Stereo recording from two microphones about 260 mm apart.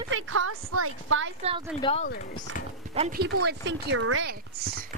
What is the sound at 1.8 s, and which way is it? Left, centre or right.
Speech, left.